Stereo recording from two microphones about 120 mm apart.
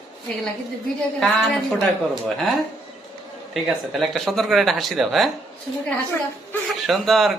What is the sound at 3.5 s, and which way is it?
Speech, centre (ahead or behind).